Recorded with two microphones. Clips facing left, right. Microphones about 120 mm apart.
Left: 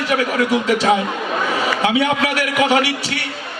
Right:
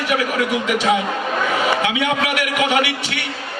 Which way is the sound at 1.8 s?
35° left (ahead or behind).